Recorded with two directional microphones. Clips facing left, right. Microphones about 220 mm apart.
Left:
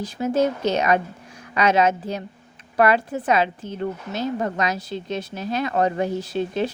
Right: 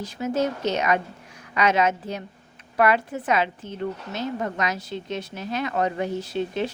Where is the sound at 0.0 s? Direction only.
30° left (ahead or behind).